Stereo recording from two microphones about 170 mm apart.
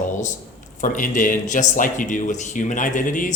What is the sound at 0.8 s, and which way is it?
Speech, 50° left (ahead or behind).